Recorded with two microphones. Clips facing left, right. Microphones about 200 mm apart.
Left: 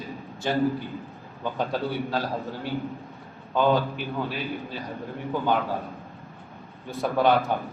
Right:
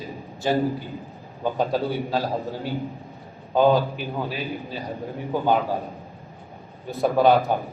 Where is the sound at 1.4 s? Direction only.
40° right (ahead or behind).